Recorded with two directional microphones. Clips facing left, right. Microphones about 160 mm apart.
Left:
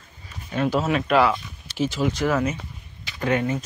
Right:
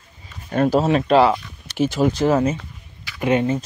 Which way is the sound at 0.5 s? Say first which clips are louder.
Right 5 dB; 45° right (ahead or behind).